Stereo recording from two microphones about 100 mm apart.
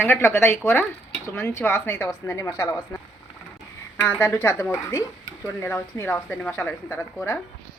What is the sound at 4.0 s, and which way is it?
A woman's voice, 25° left (ahead or behind).